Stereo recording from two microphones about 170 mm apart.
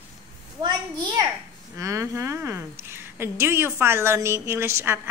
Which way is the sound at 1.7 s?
20° right (ahead or behind).